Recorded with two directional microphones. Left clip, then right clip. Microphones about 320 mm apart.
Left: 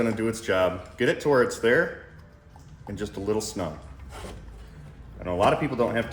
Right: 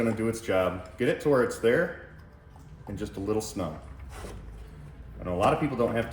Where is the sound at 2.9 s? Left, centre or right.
Left.